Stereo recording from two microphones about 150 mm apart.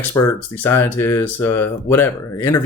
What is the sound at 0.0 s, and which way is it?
Speech, 20° left (ahead or behind).